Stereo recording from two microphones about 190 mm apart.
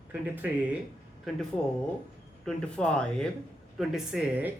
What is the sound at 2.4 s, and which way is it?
A woman's voice, 5° left (ahead or behind).